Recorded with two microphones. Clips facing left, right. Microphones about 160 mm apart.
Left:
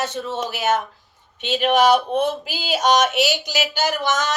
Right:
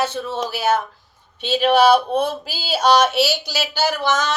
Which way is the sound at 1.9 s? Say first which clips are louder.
Right 1 dB; 40° right (ahead or behind).